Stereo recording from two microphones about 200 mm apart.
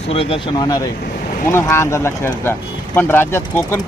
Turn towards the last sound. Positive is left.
turn(degrees=10)  # may be behind; listen again after turning